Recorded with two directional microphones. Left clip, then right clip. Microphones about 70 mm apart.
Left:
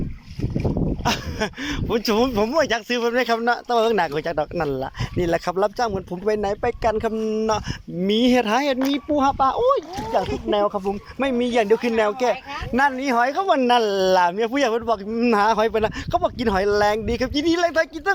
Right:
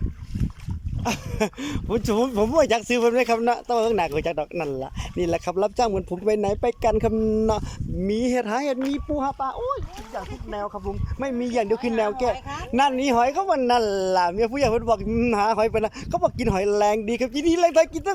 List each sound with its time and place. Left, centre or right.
1.0 s speech: right
3.1 s speech: right
8.0 s speech: right
9.6 s speech: left
10.1 s speech: left
11.2 s speech: centre
11.4 s a man's voice: centre
11.8 s speech: right
13.0 s speech: right
13.4 s speech: centre
14.8 s speech: right
15.3 s speech: right